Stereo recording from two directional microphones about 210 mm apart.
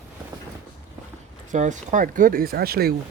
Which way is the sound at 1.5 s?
35° right (ahead or behind).